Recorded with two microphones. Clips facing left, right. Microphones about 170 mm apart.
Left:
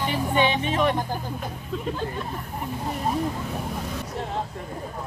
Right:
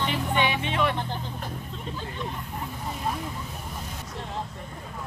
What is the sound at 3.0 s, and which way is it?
Speech, 30° left (ahead or behind).